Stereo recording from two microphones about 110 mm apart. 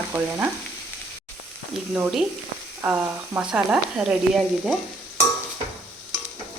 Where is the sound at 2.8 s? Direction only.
15° right (ahead or behind).